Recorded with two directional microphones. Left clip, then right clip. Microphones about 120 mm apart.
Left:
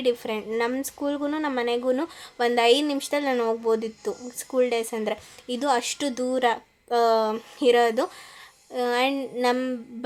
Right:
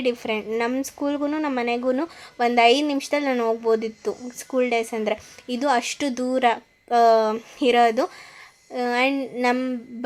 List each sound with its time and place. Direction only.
0.0 s speech: 30° right (ahead or behind)